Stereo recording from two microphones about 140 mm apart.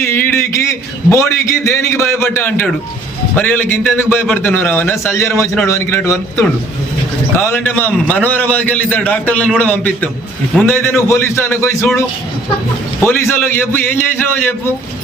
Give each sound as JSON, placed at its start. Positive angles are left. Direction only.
{"t": 0.0, "sound": "a man's voice", "side_deg": 15}
{"t": 13.0, "sound": "a man's voice", "side_deg": 15}